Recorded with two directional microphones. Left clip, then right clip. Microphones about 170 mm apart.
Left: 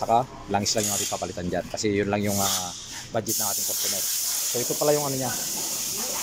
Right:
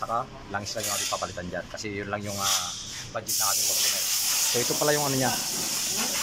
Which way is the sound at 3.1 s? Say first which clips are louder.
Left 1 dB; 35° left (ahead or behind).